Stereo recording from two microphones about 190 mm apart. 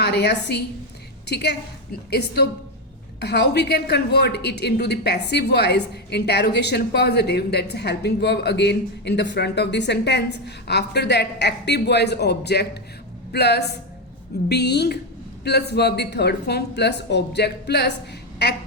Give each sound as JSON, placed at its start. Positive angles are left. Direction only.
{"t": 0.0, "sound": "a woman's voice", "side_deg": 60}